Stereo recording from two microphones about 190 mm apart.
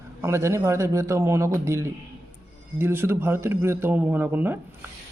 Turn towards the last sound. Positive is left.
turn(degrees=-10)  # may be behind; listen again after turning